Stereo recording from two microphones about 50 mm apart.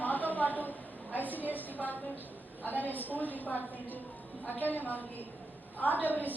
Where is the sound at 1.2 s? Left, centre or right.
Left.